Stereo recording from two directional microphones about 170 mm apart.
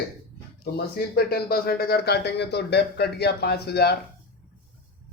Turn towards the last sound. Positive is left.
turn(degrees=70)  # may be behind; listen again after turning